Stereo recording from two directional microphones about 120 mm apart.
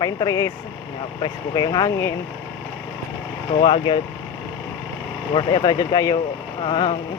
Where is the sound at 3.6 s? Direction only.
45° left (ahead or behind).